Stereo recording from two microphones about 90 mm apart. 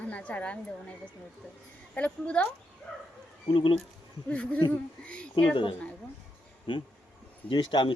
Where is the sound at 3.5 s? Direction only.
70° left (ahead or behind).